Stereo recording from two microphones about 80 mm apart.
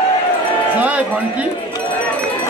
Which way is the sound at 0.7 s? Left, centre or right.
Centre.